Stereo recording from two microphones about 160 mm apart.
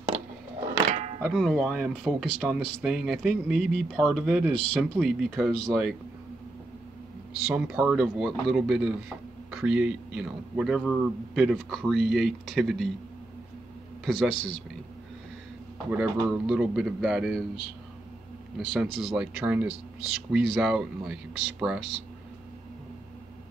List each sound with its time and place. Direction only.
1.2 s speech: centre (ahead or behind)
7.4 s speech: 5° right (ahead or behind)
14.0 s speech: centre (ahead or behind)
15.9 s speech: 5° right (ahead or behind)
18.7 s speech: 5° right (ahead or behind)